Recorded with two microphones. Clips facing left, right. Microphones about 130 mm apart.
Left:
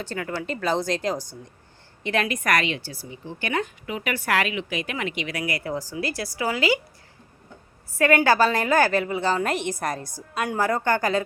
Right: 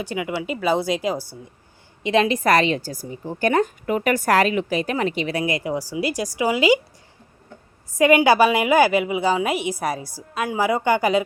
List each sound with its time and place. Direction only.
0.0 s a woman's voice: 10° right (ahead or behind)
2.0 s a woman's voice: 20° right (ahead or behind)
7.9 s a woman's voice: 15° right (ahead or behind)